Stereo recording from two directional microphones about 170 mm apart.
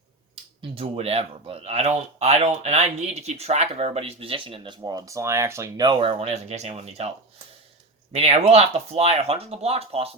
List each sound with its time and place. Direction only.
0.8 s speech: 35° right (ahead or behind)
8.1 s speech: 35° right (ahead or behind)